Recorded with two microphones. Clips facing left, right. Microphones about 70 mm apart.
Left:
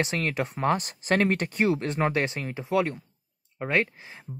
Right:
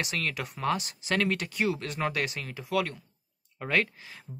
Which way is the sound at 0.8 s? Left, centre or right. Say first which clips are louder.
Left 5 dB; left.